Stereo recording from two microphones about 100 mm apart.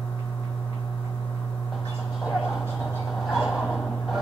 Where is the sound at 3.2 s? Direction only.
Centre (ahead or behind).